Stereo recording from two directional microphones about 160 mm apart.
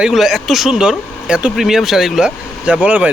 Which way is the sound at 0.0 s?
Centre (ahead or behind).